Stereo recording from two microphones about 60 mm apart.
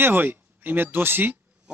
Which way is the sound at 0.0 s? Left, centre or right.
Right.